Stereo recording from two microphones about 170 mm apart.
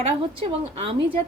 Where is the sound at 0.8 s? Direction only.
35° right (ahead or behind).